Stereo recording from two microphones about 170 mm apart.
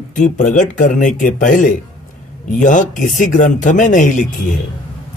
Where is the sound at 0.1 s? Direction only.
45° left (ahead or behind).